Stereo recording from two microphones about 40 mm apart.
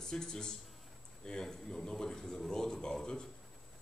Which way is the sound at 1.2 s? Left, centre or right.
Centre.